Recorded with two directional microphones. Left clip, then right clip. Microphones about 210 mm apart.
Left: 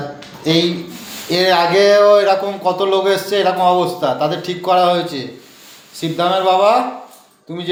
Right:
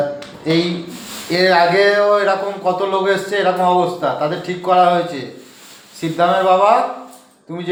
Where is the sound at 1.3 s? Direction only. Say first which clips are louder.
Even; 25° left (ahead or behind).